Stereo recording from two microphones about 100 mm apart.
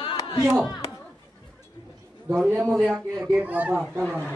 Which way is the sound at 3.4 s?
15° right (ahead or behind).